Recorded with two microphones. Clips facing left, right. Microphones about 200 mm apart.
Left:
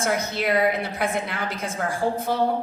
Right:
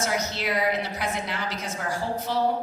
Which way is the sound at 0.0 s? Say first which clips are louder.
Left 3 dB; 55° left (ahead or behind).